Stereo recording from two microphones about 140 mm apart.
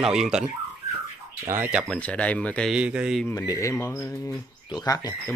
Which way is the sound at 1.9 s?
10° left (ahead or behind).